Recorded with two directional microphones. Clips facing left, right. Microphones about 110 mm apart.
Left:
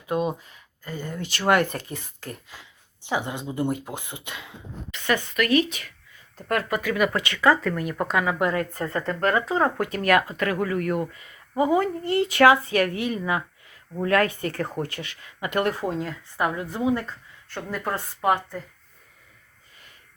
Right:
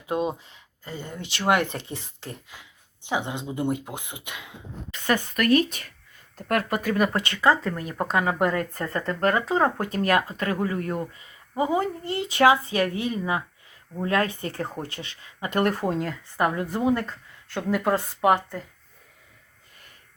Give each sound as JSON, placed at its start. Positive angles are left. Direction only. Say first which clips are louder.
{"t": 0.1, "sound": "speech", "louder": "left 1 dB", "side_deg": -25}
{"t": 4.9, "sound": "speech", "louder": "even", "side_deg": -40}
{"t": 8.2, "sound": "speech", "louder": "right 1 dB", "side_deg": -45}
{"t": 8.8, "sound": "speech", "louder": "left 1 dB", "side_deg": 25}
{"t": 9.2, "sound": "speech", "louder": "even", "side_deg": -25}
{"t": 15.8, "sound": "a woman's voice", "louder": "right 1 dB", "side_deg": 0}
{"t": 16.7, "sound": "speech", "louder": "even", "side_deg": -55}